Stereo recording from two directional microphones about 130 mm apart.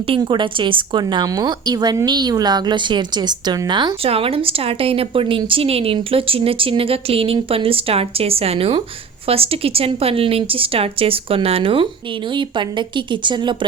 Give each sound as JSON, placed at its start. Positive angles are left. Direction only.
{"t": 0.2, "sound": "a woman's voice", "side_deg": -35}